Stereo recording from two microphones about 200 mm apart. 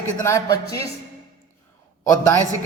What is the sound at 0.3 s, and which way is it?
Speech, 15° left (ahead or behind).